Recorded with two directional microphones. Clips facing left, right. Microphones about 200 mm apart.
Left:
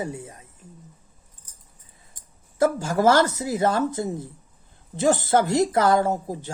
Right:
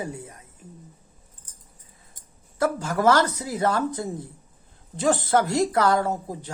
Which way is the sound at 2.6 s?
25° left (ahead or behind).